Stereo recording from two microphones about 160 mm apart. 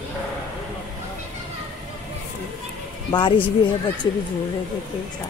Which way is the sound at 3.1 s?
25° left (ahead or behind).